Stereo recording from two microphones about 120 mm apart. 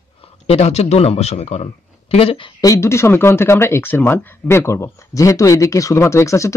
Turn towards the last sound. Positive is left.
turn(degrees=25)  # may be behind; listen again after turning